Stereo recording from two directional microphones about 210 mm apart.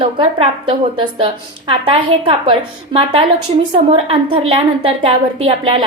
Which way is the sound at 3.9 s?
25° right (ahead or behind).